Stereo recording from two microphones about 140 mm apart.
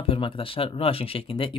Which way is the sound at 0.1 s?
40° left (ahead or behind).